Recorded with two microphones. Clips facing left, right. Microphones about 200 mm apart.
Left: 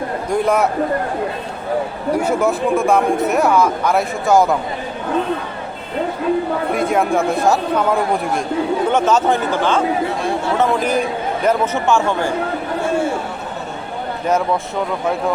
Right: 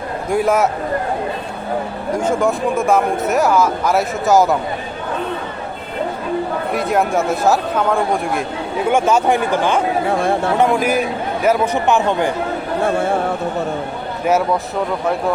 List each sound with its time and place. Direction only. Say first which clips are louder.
0.3 s speech: right 1 dB; 5° right (ahead or behind)
2.1 s speech: even; 5° left (ahead or behind)
6.7 s speech: even; centre (ahead or behind)
10.1 s chatter: right 3 dB; 55° right (ahead or behind)
10.6 s speech: left 1 dB; 10° right (ahead or behind)